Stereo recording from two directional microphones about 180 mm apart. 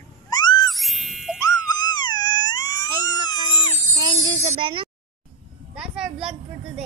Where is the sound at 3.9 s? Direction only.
25° right (ahead or behind).